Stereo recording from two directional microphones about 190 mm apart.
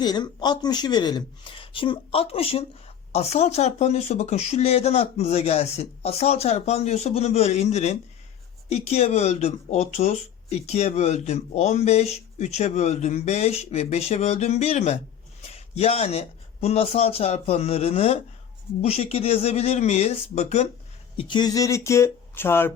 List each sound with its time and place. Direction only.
0.0 s speech: 20° left (ahead or behind)
21.2 s speech: 25° left (ahead or behind)